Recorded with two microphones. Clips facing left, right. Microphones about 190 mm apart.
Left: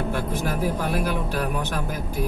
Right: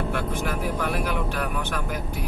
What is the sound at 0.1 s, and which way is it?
Speech, 35° left (ahead or behind).